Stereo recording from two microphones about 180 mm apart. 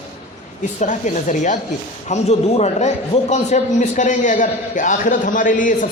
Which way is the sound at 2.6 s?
40° left (ahead or behind).